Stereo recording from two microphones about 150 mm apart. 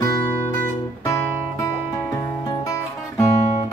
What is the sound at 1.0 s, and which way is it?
Guitar, 20° left (ahead or behind).